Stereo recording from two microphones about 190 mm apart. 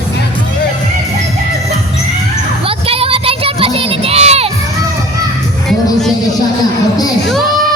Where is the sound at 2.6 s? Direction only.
30° right (ahead or behind).